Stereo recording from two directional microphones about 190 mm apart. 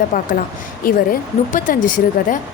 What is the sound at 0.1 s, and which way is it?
A woman's voice, 50° left (ahead or behind).